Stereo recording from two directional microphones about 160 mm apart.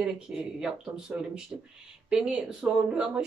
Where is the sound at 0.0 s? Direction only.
5° right (ahead or behind).